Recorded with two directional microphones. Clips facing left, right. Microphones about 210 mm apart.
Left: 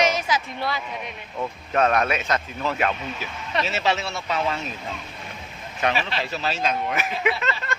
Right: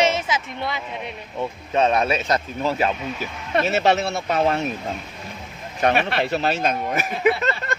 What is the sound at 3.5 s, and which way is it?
Speech, 55° right (ahead or behind).